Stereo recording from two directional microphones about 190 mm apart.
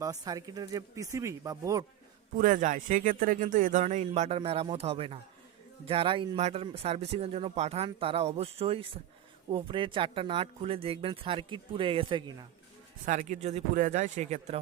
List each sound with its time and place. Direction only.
0.0 s speech: 20° right (ahead or behind)
2.3 s speech: 45° right (ahead or behind); by 12.5 s 20° right (ahead or behind)
13.1 s speech: 40° right (ahead or behind)